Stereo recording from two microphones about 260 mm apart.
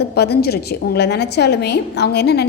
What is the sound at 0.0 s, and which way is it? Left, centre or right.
A woman's voice, left.